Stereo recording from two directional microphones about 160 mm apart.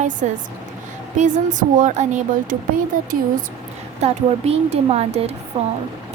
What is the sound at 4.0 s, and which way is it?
Speech, 40° right (ahead or behind).